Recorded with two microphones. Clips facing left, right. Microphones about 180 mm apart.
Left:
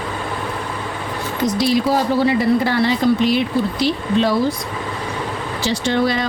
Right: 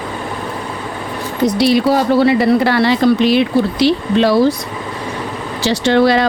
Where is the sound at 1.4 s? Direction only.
70° right (ahead or behind).